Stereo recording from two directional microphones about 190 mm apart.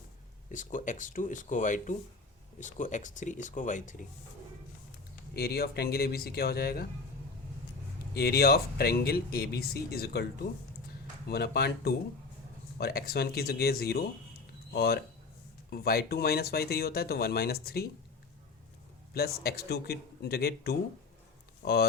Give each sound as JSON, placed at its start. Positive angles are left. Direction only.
{"t": 0.5, "sound": "speech", "side_deg": 45}
{"t": 5.3, "sound": "speech", "side_deg": 55}
{"t": 8.1, "sound": "speech", "side_deg": 55}
{"t": 19.1, "sound": "speech", "side_deg": 55}